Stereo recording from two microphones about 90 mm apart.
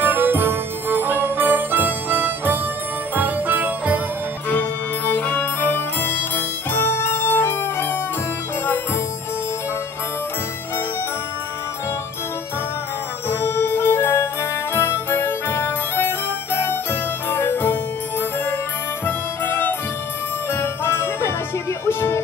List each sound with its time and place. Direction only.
0.0 s music: 20° right (ahead or behind)
3.2 s jingle bell: 20° right (ahead or behind)
4.5 s music: 20° left (ahead or behind)
13.3 s music: 25° left (ahead or behind)
19.0 s music: 20° left (ahead or behind)
20.5 s jingle bell: 25° left (ahead or behind)
21.8 s music: 25° left (ahead or behind)